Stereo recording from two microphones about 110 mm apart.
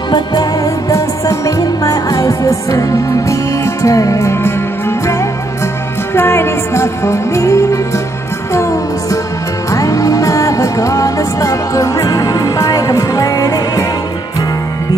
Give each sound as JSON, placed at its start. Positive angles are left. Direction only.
{"t": 0.1, "sound": "music", "side_deg": 35}
{"t": 6.1, "sound": "music", "side_deg": 25}